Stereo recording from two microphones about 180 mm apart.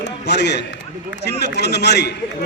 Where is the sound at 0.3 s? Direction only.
70° left (ahead or behind).